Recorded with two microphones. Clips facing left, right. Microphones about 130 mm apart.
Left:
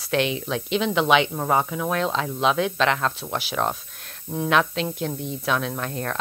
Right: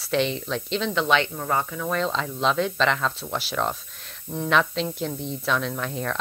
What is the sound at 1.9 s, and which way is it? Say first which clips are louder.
Speech: even; 5° left (ahead or behind).